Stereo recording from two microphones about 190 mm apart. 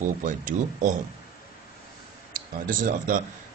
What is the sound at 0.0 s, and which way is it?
Speech, 40° right (ahead or behind).